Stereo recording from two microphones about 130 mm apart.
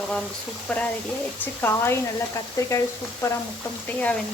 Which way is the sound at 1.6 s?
20° left (ahead or behind).